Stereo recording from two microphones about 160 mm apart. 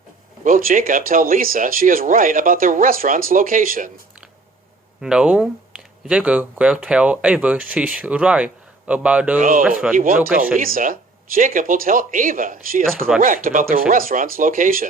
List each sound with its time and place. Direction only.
0.4 s speech: 60° right (ahead or behind)
4.9 s speech: 5° right (ahead or behind)
9.4 s speech: 60° right (ahead or behind)
9.6 s speech: 5° right (ahead or behind)
9.9 s speech: 60° right (ahead or behind)